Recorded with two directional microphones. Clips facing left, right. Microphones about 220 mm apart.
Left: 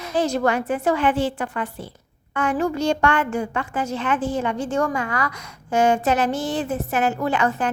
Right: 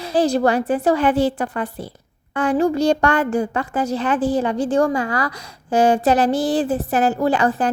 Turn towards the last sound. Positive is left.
turn(degrees=-35)  # may be behind; listen again after turning